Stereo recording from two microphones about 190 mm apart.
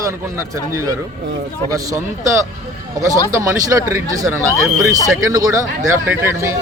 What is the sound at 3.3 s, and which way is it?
Speech, 15° right (ahead or behind).